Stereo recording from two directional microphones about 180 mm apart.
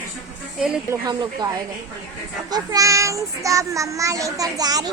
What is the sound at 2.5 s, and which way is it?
Child singing, 20° right (ahead or behind).